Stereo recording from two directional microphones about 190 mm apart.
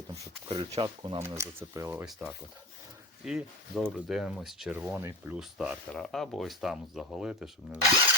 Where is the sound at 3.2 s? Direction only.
5° right (ahead or behind).